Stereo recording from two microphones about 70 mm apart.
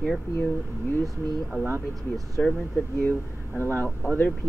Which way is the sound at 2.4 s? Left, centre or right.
Centre.